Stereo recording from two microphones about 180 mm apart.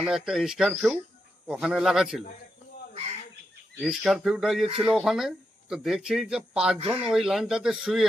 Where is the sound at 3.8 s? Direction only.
Centre (ahead or behind).